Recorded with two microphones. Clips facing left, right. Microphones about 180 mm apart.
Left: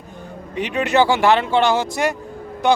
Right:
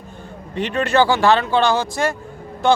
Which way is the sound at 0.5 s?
15° left (ahead or behind).